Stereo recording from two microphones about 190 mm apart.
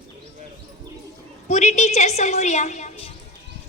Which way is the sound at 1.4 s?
35° left (ahead or behind).